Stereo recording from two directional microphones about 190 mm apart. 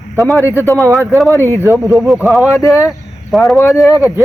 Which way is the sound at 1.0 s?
Centre (ahead or behind).